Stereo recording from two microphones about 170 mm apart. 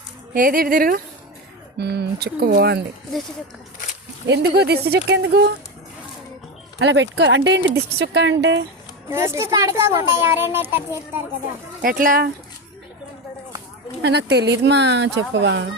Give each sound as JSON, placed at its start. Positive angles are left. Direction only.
{"t": 0.3, "sound": "speech", "side_deg": -55}
{"t": 1.8, "sound": "speech", "side_deg": -75}
{"t": 4.3, "sound": "speech", "side_deg": -70}
{"t": 6.7, "sound": "speech", "side_deg": -90}
{"t": 9.0, "sound": "a child's voice", "side_deg": -15}
{"t": 11.8, "sound": "speech", "side_deg": -55}
{"t": 14.0, "sound": "speech", "side_deg": -80}